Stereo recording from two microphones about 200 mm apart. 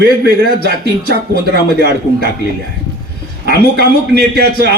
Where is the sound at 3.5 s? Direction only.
50° right (ahead or behind).